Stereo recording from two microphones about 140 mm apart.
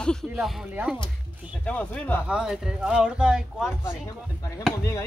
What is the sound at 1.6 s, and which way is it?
Speech, 10° left (ahead or behind).